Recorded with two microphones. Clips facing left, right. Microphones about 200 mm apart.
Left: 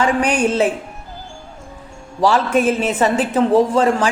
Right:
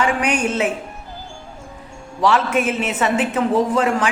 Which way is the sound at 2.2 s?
35° left (ahead or behind).